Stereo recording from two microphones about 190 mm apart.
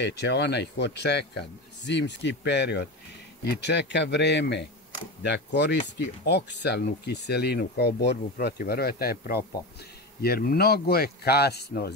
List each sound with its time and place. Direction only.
0.0 s speech: 65° left (ahead or behind)